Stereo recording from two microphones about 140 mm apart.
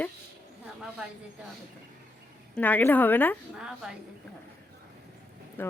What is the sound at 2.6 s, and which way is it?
Speech, 10° left (ahead or behind).